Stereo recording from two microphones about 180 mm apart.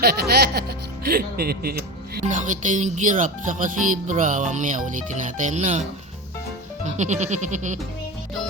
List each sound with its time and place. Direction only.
0.0 s music: 60° right (ahead or behind)
1.0 s speech: 60° right (ahead or behind)
2.2 s speech: 45° right (ahead or behind)
6.9 s music: 40° right (ahead or behind)